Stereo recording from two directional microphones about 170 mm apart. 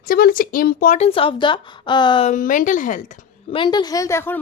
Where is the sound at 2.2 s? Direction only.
50° left (ahead or behind).